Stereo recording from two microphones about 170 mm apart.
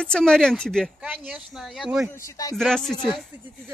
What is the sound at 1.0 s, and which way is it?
Speech, 10° right (ahead or behind).